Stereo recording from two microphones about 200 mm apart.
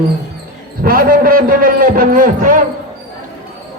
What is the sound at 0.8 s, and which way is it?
A man's voice, 45° right (ahead or behind).